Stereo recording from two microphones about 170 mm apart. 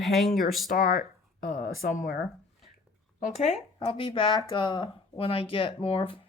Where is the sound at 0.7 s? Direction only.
55° left (ahead or behind).